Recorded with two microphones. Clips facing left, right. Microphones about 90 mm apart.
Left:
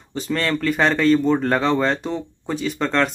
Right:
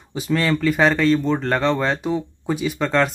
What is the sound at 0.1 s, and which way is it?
Speech, 5° right (ahead or behind).